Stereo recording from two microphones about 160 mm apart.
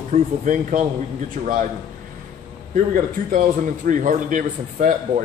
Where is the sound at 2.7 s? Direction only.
55° right (ahead or behind).